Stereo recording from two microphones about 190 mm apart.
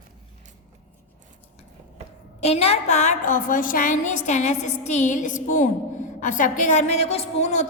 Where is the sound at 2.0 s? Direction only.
35° right (ahead or behind).